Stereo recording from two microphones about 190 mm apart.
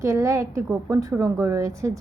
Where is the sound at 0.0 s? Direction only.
15° right (ahead or behind).